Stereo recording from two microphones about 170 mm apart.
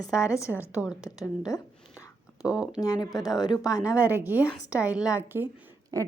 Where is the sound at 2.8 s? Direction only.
20° left (ahead or behind).